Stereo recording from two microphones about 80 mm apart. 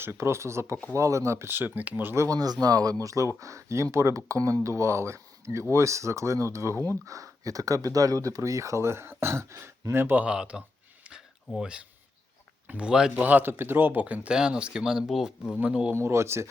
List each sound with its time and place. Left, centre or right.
0.0 s speech: right
2.1 s speech: right; by 10.6 s centre
11.0 s a sound: centre
12.6 s speech: centre
13.2 s speech: right; by 15.3 s centre
16.0 s speech: right